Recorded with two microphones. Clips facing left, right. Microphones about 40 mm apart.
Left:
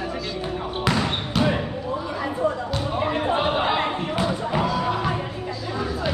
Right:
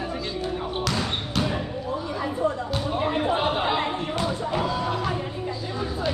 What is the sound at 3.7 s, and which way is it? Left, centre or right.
Music, left.